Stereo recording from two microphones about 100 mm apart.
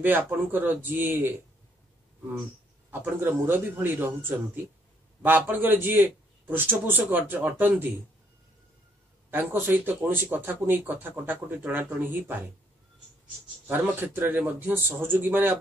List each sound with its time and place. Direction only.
0.0 s speech: 20° right (ahead or behind)
2.9 s speech: 20° right (ahead or behind)
9.3 s speech: 20° right (ahead or behind)
13.7 s speech: 20° right (ahead or behind)